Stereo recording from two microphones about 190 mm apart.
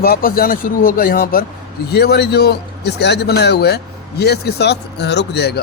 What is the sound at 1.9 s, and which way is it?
A man's voice, 60° left (ahead or behind).